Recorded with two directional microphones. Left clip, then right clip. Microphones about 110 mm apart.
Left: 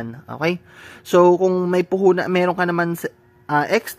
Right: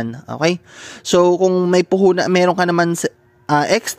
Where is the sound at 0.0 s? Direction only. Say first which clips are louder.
Right 5 dB; 40° right (ahead or behind).